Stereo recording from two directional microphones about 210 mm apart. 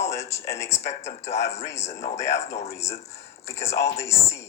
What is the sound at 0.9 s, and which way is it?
Speech, 30° left (ahead or behind).